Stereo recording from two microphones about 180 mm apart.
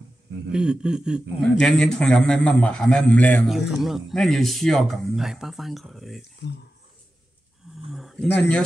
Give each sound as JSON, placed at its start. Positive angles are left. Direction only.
{"t": 0.5, "sound": "speech", "side_deg": -5}
{"t": 7.7, "sound": "speech", "side_deg": 0}